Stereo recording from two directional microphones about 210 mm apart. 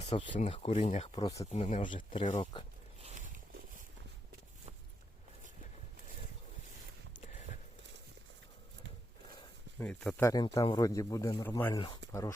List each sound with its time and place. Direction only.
0.1 s speech: 30° left (ahead or behind)
1.5 s speech: 35° left (ahead or behind)
1.8 s speech: 25° left (ahead or behind)
3.0 s a sound: 30° right (ahead or behind)
9.8 s speech: 5° left (ahead or behind)
10.2 s speech: 15° left (ahead or behind)